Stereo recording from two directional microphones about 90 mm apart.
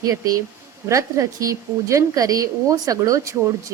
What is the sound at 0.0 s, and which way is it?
A woman's voice, 40° right (ahead or behind).